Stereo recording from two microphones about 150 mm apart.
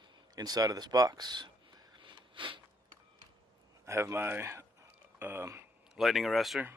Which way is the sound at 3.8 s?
15° right (ahead or behind).